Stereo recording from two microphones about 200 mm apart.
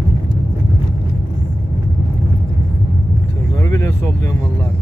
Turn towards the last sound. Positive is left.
turn(degrees=15)  # may be behind; listen again after turning